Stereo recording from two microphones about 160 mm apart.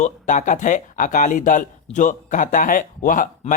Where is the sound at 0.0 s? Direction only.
50° left (ahead or behind).